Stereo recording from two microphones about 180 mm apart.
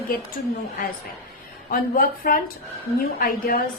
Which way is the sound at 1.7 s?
55° left (ahead or behind).